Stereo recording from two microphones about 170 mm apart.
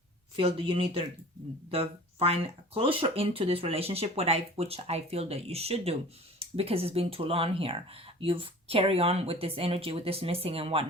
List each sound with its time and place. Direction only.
0.3 s speech: 35° right (ahead or behind)